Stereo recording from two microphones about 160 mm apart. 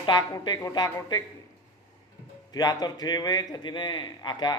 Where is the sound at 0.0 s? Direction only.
30° left (ahead or behind).